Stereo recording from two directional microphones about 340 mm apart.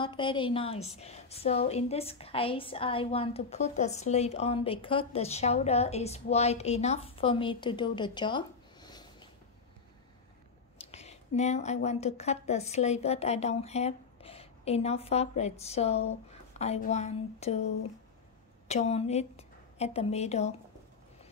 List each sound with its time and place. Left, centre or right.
0.0 s a woman's voice: centre
10.8 s a woman's voice: centre
16.1 s a sound: centre
18.7 s a woman's voice: centre